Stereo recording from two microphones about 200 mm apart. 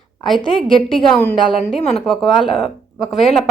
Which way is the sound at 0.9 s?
Centre (ahead or behind).